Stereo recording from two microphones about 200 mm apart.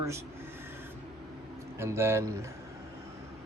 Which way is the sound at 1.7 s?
15° right (ahead or behind).